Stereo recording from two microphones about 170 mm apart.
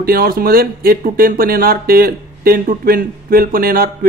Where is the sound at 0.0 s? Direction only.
60° right (ahead or behind).